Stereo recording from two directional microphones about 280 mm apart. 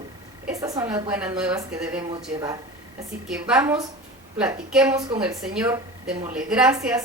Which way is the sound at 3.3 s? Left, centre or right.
Centre.